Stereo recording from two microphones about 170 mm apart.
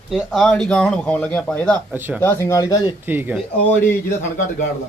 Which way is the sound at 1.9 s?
10° right (ahead or behind).